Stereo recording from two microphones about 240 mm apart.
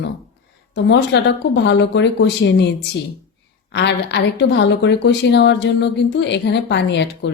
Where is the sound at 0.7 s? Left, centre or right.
Left.